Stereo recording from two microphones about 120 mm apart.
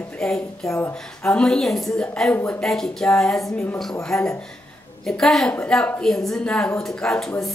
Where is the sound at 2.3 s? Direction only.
15° left (ahead or behind).